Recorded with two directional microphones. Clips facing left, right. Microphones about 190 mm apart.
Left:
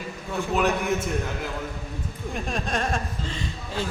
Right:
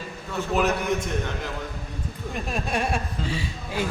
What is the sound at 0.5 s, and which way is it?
Speech, centre (ahead or behind).